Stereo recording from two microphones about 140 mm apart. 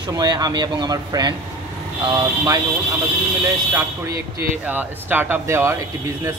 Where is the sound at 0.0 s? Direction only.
30° right (ahead or behind).